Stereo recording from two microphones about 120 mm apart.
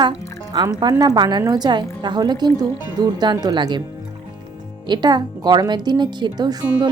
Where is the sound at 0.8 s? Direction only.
35° right (ahead or behind).